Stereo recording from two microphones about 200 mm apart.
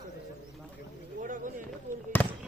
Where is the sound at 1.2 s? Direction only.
40° right (ahead or behind).